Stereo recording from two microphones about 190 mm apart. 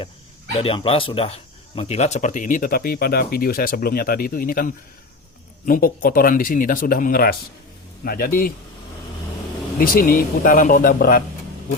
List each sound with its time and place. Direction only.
0.6 s speech: 30° left (ahead or behind); by 8.5 s 50° left (ahead or behind)
9.7 s speech: 50° left (ahead or behind)